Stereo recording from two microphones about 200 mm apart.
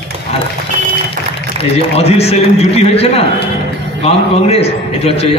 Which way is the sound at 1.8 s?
30° left (ahead or behind).